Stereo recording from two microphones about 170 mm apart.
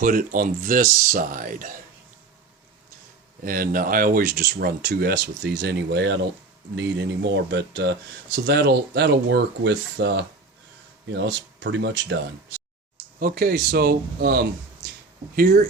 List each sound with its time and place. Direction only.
0.0 s speech: 55° right (ahead or behind)
3.4 s speech: 55° right (ahead or behind); by 12.2 s 90° right
13.1 s speech: 60° right (ahead or behind)